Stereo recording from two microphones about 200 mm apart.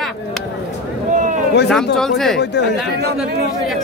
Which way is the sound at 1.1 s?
40° right (ahead or behind).